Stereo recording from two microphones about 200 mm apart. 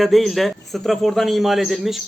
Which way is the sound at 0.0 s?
Centre (ahead or behind).